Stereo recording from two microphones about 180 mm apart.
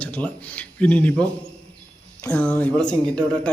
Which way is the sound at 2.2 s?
10° left (ahead or behind).